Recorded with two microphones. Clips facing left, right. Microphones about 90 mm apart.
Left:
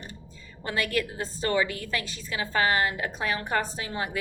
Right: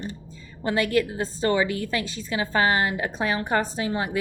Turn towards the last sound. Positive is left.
turn(degrees=-25)  # may be behind; listen again after turning